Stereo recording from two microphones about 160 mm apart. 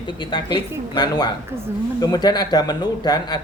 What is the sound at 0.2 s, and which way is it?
Speech, 30° left (ahead or behind).